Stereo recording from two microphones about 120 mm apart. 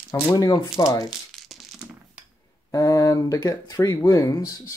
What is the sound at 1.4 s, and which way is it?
Crushing, 5° left (ahead or behind).